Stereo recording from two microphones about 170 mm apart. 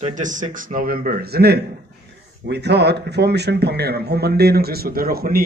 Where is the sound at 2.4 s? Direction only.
80° right.